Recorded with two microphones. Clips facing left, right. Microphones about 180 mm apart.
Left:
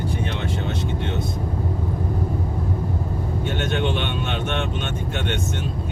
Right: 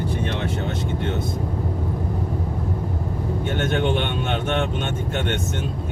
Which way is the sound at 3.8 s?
50° right (ahead or behind).